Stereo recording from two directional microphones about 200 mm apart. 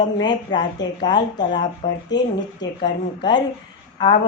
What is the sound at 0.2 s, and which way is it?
A woman's voice, 20° left (ahead or behind).